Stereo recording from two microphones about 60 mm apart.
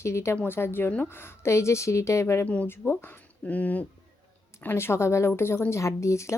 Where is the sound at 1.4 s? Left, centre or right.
Left.